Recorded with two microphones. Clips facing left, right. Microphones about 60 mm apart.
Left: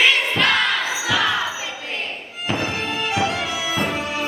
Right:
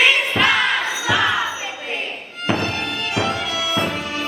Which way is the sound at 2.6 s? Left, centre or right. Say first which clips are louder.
Even; centre.